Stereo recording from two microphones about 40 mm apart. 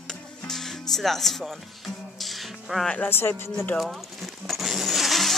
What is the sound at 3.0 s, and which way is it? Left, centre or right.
Speech, left.